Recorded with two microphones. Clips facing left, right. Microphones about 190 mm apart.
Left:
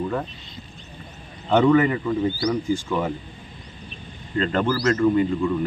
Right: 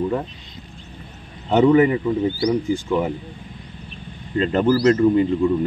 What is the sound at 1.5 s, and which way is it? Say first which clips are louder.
Speech: right 3 dB; 20° right (ahead or behind).